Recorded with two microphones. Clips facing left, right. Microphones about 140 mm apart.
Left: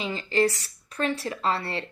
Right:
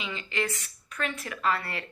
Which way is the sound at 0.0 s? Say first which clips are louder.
Left 8 dB; 35° left (ahead or behind).